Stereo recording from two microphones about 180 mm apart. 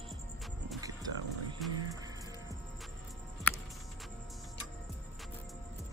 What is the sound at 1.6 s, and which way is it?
Music, centre (ahead or behind).